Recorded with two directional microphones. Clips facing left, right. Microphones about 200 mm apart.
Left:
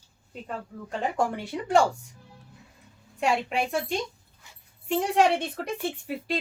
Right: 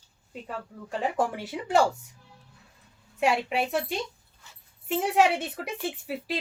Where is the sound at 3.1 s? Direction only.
5° right (ahead or behind).